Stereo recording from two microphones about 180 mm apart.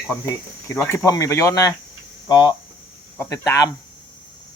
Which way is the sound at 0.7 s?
15° left (ahead or behind).